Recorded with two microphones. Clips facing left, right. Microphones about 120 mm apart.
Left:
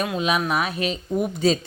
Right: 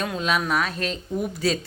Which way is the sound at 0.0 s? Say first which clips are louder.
Left 2 dB; 15° left (ahead or behind).